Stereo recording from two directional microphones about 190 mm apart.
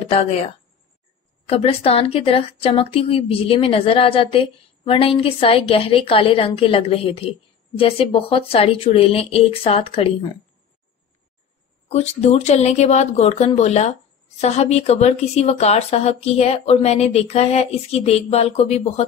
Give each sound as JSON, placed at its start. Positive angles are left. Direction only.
{"t": 1.5, "sound": "a woman's voice", "side_deg": 30}
{"t": 11.9, "sound": "a woman's voice", "side_deg": 35}